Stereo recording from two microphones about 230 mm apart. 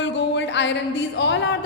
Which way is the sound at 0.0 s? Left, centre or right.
Left.